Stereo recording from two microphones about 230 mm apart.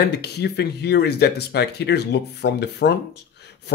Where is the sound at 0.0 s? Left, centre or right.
Left.